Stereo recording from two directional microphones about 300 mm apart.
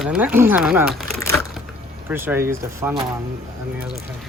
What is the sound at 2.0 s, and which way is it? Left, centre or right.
Speech, centre.